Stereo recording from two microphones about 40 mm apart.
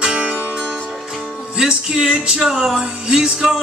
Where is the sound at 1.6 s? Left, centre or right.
Centre.